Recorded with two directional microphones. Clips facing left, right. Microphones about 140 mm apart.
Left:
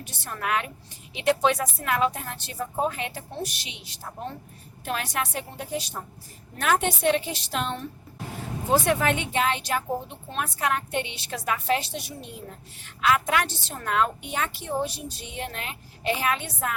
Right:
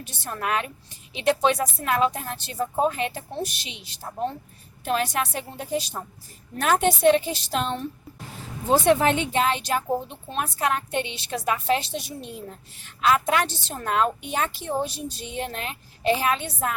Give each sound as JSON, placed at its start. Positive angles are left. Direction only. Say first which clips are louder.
{"t": 0.0, "sound": "a woman's voice", "louder": "right 2 dB", "side_deg": -35}